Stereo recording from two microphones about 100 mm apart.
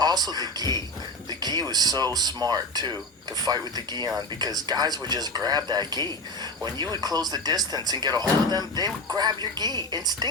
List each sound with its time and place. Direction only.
0.0 s a man's voice: 40° right (ahead or behind)